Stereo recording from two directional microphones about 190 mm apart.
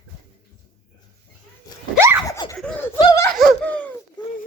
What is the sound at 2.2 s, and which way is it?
Laughter, 20° left (ahead or behind).